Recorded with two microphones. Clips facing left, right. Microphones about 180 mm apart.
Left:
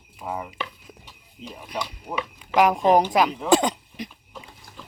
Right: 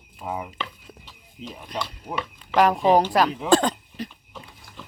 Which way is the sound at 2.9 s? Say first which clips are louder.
Even; 15° left (ahead or behind).